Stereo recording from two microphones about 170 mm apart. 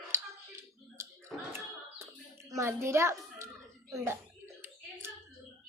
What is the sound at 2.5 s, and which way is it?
A child's voice, 15° right (ahead or behind).